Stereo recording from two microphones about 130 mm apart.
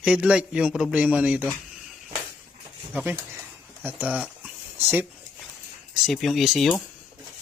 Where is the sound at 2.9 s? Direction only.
10° right (ahead or behind).